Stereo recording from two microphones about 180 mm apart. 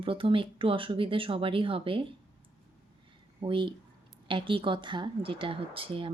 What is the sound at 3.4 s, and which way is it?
A woman's voice, 25° right (ahead or behind).